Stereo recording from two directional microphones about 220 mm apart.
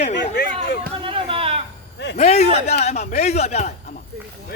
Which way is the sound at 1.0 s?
25° right (ahead or behind).